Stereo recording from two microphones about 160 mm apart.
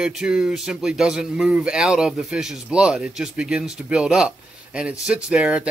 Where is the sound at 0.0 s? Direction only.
5° right (ahead or behind).